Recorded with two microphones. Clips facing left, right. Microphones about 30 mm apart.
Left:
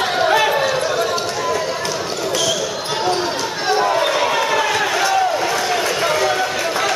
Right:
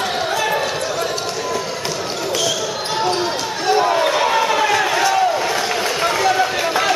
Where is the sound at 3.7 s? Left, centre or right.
Centre.